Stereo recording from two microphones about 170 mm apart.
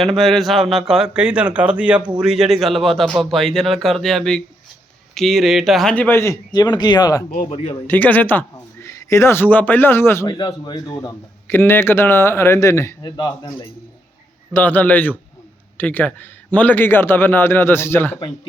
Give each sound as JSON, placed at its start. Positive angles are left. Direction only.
{"t": 0.0, "sound": "a man's voice", "side_deg": 0}
{"t": 7.3, "sound": "speech", "side_deg": 50}
{"t": 7.9, "sound": "speech", "side_deg": 10}
{"t": 10.2, "sound": "a man's voice", "side_deg": 25}
{"t": 14.5, "sound": "a man's voice", "side_deg": 10}